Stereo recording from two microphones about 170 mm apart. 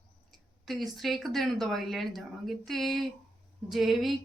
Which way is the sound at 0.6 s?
Centre (ahead or behind).